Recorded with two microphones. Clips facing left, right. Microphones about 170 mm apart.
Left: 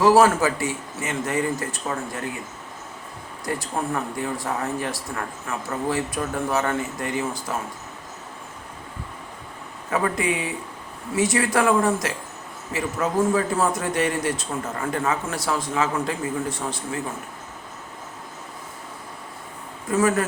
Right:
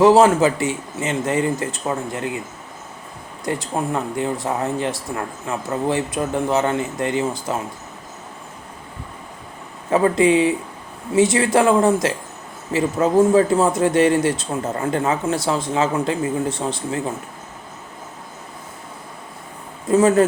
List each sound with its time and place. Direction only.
0.0 s speech: 25° right (ahead or behind)
3.4 s speech: 20° right (ahead or behind)
9.9 s speech: 30° right (ahead or behind)
19.9 s speech: 25° right (ahead or behind)